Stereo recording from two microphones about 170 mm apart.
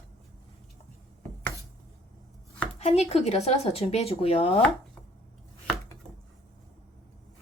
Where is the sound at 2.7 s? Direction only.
40° left (ahead or behind).